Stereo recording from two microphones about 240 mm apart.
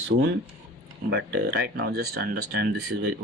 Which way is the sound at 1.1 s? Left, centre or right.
Right.